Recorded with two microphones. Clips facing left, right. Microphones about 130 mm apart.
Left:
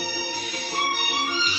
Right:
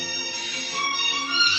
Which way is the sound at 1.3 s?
50° left (ahead or behind).